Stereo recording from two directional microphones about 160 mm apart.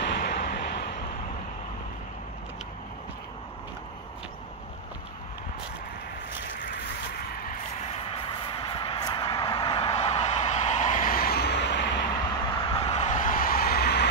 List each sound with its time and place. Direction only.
0.0 s vehicle: 85° left
7.9 s vehicle: 35° left (ahead or behind); by 12.2 s 90° left
12.5 s a sound: 35° left (ahead or behind); by 14.0 s 85° left